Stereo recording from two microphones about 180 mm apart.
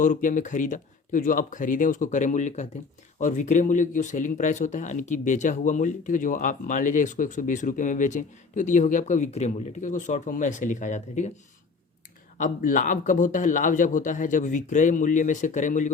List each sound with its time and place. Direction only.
0.0 s speech: 45° left (ahead or behind)
12.4 s speech: 45° left (ahead or behind)